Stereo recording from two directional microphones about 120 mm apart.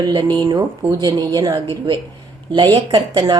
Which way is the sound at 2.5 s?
45° right (ahead or behind).